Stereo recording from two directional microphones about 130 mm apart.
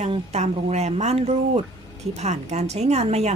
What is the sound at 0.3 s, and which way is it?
A woman's voice, 55° right (ahead or behind).